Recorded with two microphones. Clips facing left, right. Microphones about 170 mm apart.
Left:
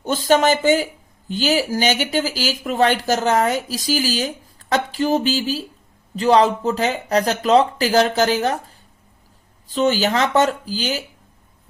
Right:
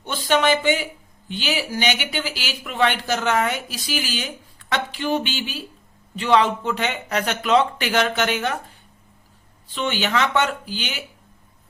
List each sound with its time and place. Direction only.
0.0 s speech: 45° left (ahead or behind)
9.7 s speech: 40° left (ahead or behind)